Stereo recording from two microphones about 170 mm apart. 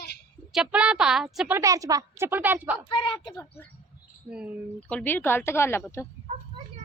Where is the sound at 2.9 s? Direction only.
30° left (ahead or behind).